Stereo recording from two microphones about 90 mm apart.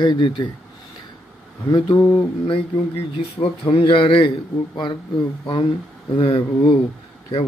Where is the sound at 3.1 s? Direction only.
90° left.